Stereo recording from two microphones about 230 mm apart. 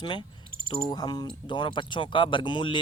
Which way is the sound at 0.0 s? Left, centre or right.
Centre.